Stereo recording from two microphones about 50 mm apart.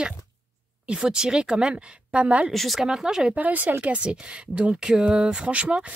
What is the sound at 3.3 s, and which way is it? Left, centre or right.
Speech, right.